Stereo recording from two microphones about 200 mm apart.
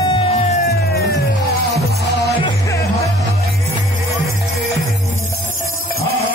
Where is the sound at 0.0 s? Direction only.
25° left (ahead or behind).